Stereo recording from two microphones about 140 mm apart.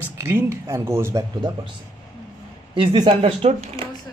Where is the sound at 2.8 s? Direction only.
40° right (ahead or behind).